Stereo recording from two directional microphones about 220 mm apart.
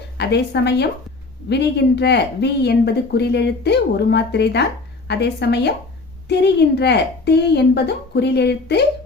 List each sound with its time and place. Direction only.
0.2 s speech: 50° left (ahead or behind)